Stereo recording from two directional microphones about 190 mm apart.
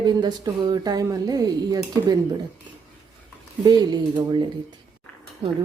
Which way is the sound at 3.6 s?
20° right (ahead or behind).